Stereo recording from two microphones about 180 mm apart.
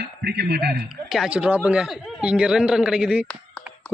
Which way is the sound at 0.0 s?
65° right (ahead or behind).